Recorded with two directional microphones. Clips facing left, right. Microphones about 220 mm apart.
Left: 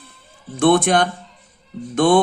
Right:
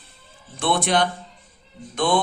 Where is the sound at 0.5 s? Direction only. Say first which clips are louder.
Left 7 dB; 50° left (ahead or behind).